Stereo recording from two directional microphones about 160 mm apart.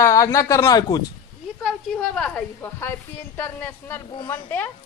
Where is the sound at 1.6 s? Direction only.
5° left (ahead or behind).